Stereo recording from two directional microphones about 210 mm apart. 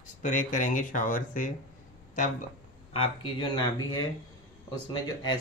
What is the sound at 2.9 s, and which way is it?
Speech, 25° left (ahead or behind).